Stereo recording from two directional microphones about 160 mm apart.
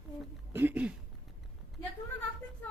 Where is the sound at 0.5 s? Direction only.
10° right (ahead or behind).